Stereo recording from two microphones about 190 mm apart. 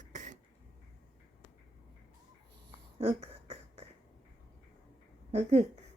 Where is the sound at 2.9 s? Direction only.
35° right (ahead or behind).